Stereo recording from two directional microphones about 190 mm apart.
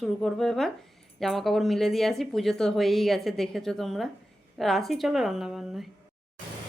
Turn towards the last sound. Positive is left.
turn(degrees=0)  # may be behind; listen again after turning